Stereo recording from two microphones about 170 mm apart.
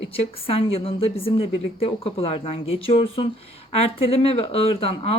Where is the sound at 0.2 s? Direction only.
35° left (ahead or behind).